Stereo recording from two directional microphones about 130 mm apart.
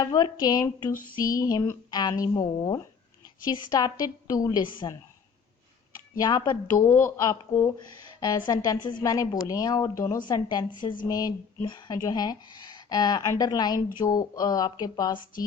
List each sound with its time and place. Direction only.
0.0 s a woman's voice: 30° left (ahead or behind)
6.1 s speech: 30° left (ahead or behind)
6.8 s a woman's voice: 20° left (ahead or behind)